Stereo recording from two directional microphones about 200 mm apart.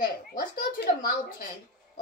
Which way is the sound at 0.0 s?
45° left (ahead or behind).